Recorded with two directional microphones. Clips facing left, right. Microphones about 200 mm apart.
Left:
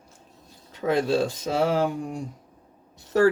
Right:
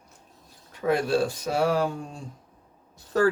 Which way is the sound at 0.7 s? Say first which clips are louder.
Left 1 dB; 25° left (ahead or behind).